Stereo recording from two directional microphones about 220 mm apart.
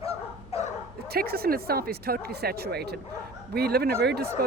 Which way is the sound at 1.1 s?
45° right (ahead or behind).